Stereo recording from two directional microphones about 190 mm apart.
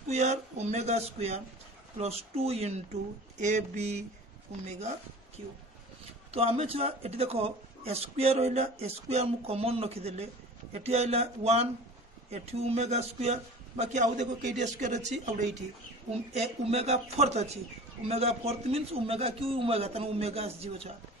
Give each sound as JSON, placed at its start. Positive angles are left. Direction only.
{"t": 0.1, "sound": "speech", "side_deg": -35}
{"t": 6.3, "sound": "speech", "side_deg": -30}